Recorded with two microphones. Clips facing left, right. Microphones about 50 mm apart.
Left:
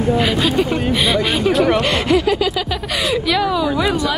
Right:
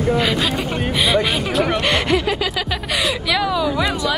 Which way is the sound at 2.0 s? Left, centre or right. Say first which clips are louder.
Left 3 dB; right.